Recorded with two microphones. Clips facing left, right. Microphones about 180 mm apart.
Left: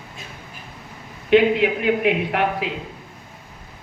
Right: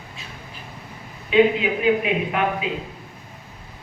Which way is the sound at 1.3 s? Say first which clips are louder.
Left 2 dB; 70° left (ahead or behind).